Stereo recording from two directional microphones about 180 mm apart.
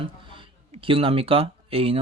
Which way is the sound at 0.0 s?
30° right (ahead or behind).